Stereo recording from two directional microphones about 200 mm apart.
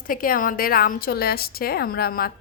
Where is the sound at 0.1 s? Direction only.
45° left (ahead or behind).